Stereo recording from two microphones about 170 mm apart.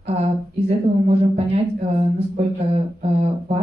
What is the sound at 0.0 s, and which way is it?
Speech, 35° right (ahead or behind).